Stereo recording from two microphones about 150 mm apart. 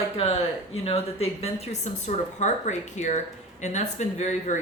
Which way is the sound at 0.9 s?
40° left (ahead or behind).